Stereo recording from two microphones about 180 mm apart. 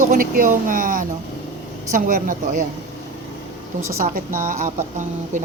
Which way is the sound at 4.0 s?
50° right (ahead or behind).